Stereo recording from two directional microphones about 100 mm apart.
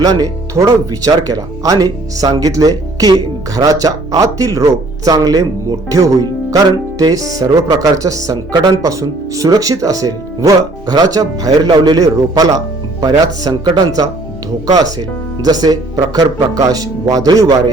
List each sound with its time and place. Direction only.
0.0 s speech: 40° right (ahead or behind)